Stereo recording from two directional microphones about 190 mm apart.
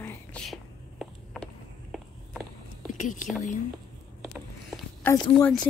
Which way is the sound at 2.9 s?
40° left (ahead or behind).